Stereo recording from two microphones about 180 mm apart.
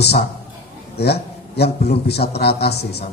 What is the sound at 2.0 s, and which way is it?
Speech, 65° left (ahead or behind).